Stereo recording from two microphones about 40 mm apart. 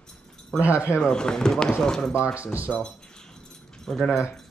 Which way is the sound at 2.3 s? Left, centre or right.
Right.